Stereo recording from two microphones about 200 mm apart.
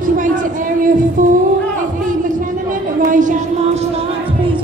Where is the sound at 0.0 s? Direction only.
40° right (ahead or behind).